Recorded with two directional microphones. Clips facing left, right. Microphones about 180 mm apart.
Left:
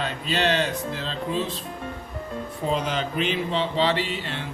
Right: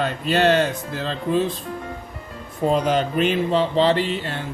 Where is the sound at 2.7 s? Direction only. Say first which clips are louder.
Right 6 dB; 50° right (ahead or behind).